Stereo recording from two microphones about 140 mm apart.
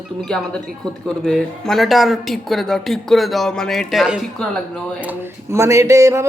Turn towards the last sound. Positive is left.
turn(degrees=-20)  # may be behind; listen again after turning